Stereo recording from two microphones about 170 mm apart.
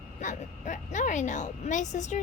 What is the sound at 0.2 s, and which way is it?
A woman's voice, 45° left (ahead or behind).